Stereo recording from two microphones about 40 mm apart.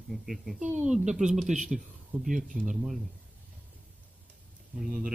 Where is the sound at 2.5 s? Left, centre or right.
Centre.